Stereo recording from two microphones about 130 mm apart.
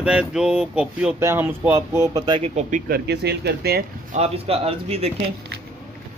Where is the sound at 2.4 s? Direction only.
65° right (ahead or behind).